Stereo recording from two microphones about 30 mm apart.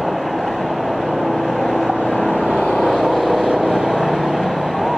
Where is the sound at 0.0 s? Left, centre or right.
Centre.